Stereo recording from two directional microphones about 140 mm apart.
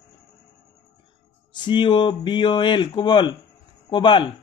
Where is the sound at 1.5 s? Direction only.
35° left (ahead or behind).